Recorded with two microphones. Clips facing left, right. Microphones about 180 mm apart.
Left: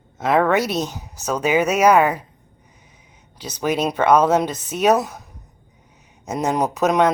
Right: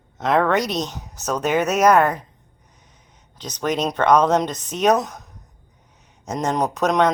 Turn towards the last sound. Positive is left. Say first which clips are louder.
# left 1 dB
turn(degrees=5)  # may be behind; listen again after turning